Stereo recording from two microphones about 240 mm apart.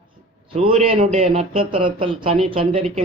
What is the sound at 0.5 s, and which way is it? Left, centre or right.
A man's voice, right.